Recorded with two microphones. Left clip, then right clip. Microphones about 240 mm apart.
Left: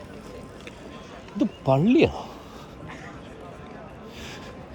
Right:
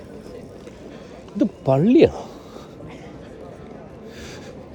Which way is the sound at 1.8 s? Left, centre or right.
Centre.